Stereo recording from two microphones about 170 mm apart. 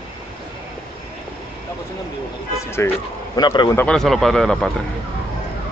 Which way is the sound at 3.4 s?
25° left (ahead or behind).